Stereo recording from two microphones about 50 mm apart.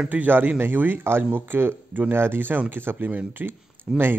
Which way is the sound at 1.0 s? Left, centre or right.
Right.